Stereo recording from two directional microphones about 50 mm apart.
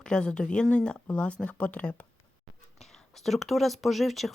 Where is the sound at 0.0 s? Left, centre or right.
Centre.